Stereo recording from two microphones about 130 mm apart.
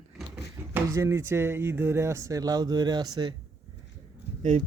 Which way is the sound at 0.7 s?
20° right (ahead or behind).